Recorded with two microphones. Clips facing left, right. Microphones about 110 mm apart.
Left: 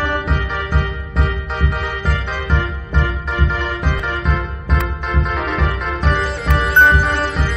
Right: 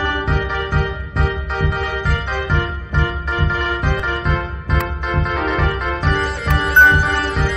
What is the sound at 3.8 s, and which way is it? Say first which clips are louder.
Music: right 1 dB; centre (ahead or behind).